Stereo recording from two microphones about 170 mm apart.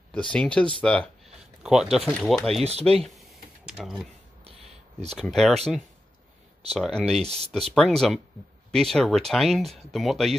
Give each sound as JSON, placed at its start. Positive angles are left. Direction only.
{"t": 0.1, "sound": "speech", "side_deg": 5}
{"t": 2.6, "sound": "speech", "side_deg": -35}
{"t": 3.0, "sound": "computer keyboard", "side_deg": 0}
{"t": 5.2, "sound": "speech", "side_deg": 0}
{"t": 6.7, "sound": "speech", "side_deg": 5}